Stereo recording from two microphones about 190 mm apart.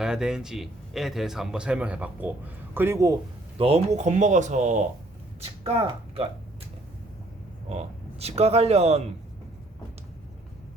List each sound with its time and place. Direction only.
0.0 s a man's voice: 5° right (ahead or behind)
3.6 s speech: 35° right (ahead or behind)
7.7 s speech: 35° right (ahead or behind)